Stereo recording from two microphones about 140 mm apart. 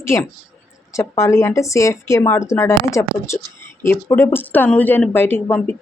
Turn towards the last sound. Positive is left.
turn(degrees=15)  # may be behind; listen again after turning